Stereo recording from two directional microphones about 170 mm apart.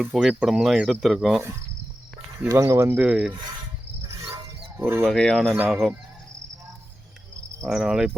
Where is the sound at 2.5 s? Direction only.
15° right (ahead or behind).